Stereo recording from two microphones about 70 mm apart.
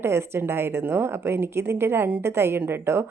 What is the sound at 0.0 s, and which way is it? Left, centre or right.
Speech, right.